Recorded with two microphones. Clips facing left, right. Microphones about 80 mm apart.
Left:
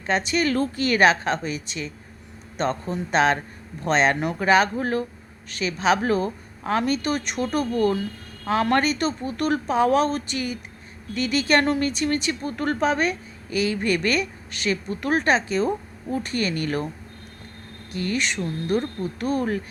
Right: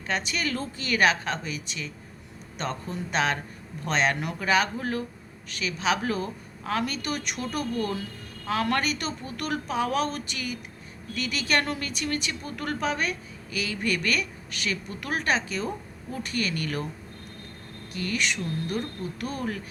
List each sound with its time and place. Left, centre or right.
0.0 s speech: left
0.5 s speech: left
0.9 s speech: left
17.9 s speech: left